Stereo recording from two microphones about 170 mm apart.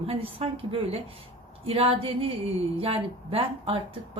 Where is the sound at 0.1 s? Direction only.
30° right (ahead or behind).